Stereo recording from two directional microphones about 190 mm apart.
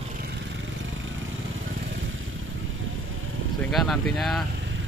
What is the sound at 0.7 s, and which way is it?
Vehicle, 90° right.